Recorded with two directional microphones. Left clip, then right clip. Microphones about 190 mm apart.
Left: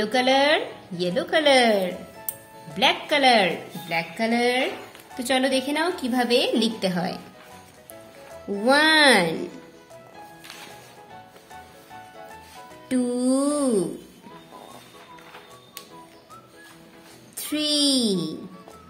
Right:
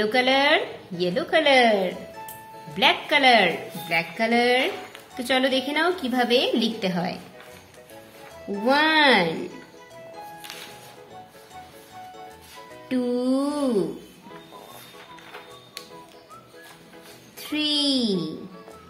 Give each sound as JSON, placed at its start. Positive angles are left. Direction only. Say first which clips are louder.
{"t": 0.0, "sound": "a woman's voice", "louder": "even", "side_deg": 10}
{"t": 8.6, "sound": "a child's voice", "louder": "left 2 dB", "side_deg": 20}
{"t": 12.8, "sound": "a child's voice", "louder": "even", "side_deg": 20}
{"t": 17.4, "sound": "a child's voice", "louder": "left 1 dB", "side_deg": 20}